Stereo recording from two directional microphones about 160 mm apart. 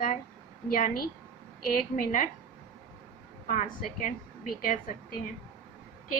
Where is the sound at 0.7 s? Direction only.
60° left (ahead or behind).